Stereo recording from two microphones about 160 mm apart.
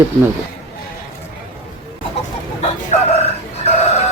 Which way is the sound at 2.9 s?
45° left (ahead or behind).